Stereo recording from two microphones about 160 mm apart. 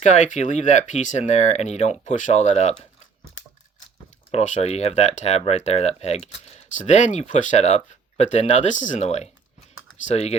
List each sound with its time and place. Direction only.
0.0 s speech: 50° left (ahead or behind)
4.3 s speech: 45° left (ahead or behind)